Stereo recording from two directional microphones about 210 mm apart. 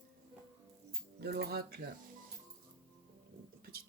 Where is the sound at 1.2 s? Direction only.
50° right (ahead or behind).